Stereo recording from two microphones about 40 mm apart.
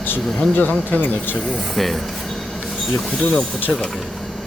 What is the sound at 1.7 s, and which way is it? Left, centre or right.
Speech, centre.